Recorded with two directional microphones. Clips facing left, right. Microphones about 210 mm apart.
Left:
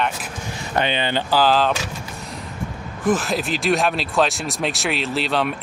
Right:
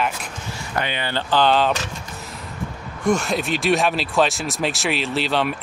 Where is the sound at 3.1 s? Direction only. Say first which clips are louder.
Even; centre (ahead or behind).